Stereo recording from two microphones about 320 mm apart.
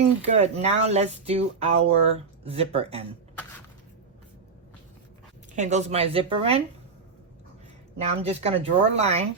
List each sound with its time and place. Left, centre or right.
0.0 s speech: right
5.5 s speech: right
7.9 s speech: centre